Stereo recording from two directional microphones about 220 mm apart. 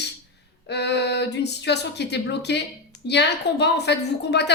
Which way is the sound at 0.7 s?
50° left (ahead or behind).